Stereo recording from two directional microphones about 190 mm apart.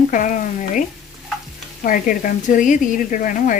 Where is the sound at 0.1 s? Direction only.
45° left (ahead or behind).